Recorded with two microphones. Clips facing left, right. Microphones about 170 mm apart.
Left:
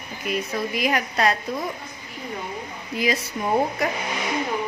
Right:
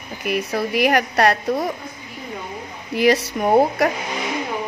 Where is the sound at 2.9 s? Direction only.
75° right (ahead or behind).